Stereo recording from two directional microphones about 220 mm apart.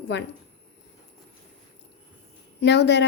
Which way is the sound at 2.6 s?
50° left (ahead or behind).